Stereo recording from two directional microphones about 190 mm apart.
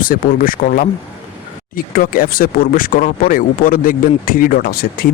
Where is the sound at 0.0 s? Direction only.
45° left (ahead or behind).